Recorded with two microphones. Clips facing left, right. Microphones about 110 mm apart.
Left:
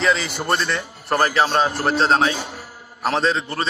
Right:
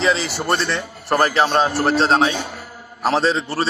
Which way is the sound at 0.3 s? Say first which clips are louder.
Right 1 dB; 25° right (ahead or behind).